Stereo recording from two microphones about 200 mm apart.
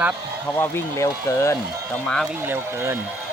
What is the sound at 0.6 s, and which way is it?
Speech, 10° left (ahead or behind).